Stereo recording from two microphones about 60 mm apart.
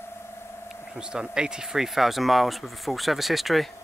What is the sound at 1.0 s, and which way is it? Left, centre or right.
Speech, centre.